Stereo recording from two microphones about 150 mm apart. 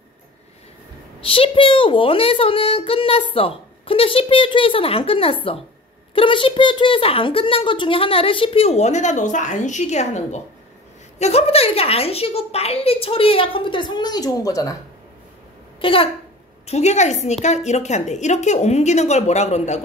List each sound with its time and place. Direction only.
1.2 s a woman's voice: 40° left (ahead or behind)
15.8 s a woman's voice: 35° left (ahead or behind)
16.6 s speech: 50° left (ahead or behind)